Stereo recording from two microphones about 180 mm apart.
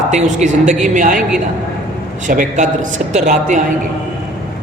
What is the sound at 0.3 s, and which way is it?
Speech, 40° right (ahead or behind).